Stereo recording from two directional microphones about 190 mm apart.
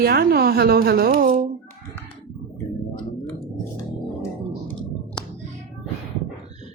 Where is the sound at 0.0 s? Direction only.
50° right (ahead or behind).